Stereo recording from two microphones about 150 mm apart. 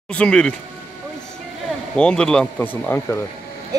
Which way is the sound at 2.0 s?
5° left (ahead or behind).